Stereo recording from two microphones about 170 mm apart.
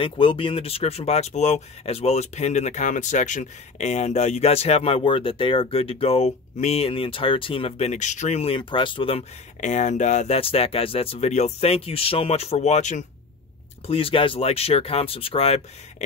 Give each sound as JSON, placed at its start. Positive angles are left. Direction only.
{"t": 0.0, "sound": "speech", "side_deg": 30}